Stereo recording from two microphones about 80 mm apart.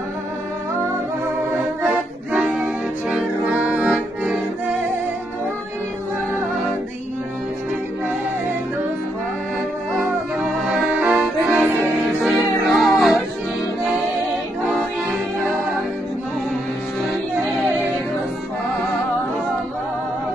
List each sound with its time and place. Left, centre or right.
1.9 s music: centre
9.9 s music: centre
10.9 s accordion: centre
12.2 s music: centre